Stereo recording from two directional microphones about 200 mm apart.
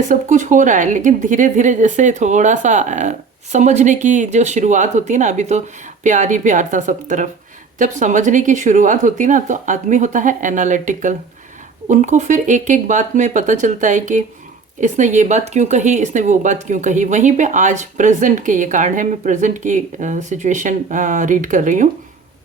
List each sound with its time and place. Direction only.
0.1 s a woman's voice: 40° right (ahead or behind)